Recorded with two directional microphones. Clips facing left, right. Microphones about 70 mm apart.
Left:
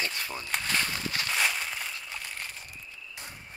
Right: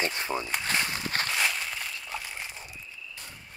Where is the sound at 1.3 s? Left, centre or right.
Centre.